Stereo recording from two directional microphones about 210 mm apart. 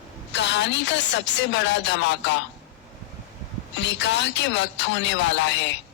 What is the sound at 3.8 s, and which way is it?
Speech, 60° left (ahead or behind).